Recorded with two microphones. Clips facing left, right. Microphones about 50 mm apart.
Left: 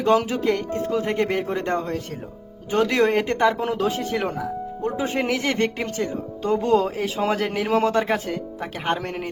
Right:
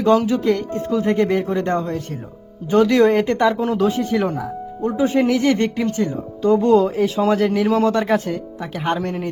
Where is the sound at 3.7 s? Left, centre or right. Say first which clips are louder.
Right 5 dB; left.